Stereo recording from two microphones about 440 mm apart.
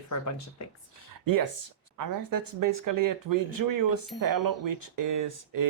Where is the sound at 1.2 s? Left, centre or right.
Right.